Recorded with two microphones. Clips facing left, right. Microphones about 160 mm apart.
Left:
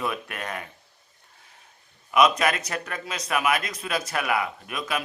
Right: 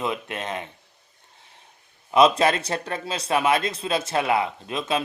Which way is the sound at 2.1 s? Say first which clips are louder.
Right 3 dB; 30° right (ahead or behind).